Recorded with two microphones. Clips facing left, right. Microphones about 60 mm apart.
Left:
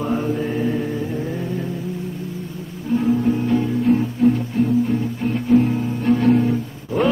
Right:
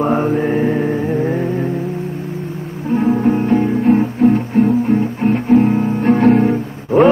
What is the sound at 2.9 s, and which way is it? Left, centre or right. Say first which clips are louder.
Music: right 4 dB; right.